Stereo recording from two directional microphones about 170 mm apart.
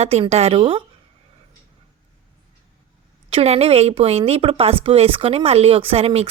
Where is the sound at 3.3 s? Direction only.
35° right (ahead or behind).